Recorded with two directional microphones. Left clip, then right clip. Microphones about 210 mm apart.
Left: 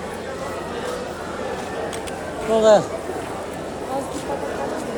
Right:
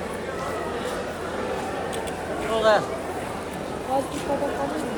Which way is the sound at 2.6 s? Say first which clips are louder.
Left 6 dB; 25° left (ahead or behind).